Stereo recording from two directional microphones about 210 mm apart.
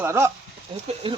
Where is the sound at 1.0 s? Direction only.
25° right (ahead or behind).